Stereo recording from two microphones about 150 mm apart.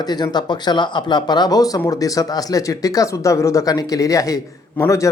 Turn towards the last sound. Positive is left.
turn(degrees=20)  # may be behind; listen again after turning